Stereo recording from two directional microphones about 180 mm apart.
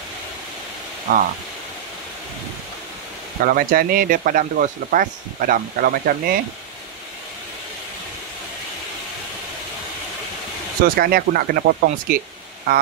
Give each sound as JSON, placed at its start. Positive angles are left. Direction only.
{"t": 1.1, "sound": "speech", "side_deg": -45}
{"t": 3.4, "sound": "speech", "side_deg": -55}
{"t": 10.8, "sound": "speech", "side_deg": -55}